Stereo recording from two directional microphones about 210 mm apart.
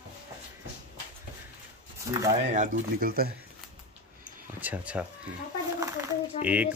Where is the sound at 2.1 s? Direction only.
15° right (ahead or behind).